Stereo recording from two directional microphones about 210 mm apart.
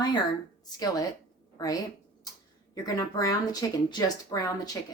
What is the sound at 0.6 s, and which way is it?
A woman's voice, 20° left (ahead or behind).